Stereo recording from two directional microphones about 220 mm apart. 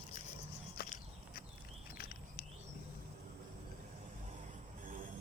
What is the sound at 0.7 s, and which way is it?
Walk, 45° left (ahead or behind).